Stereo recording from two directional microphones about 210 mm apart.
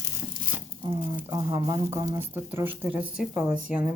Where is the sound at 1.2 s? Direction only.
20° right (ahead or behind).